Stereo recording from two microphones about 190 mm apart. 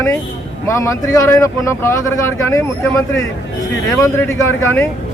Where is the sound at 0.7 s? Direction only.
15° left (ahead or behind).